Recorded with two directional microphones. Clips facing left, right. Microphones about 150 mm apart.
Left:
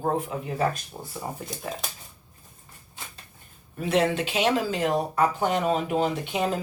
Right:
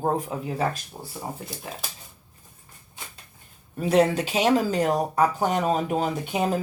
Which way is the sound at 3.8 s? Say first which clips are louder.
Right 3 dB; 40° right (ahead or behind).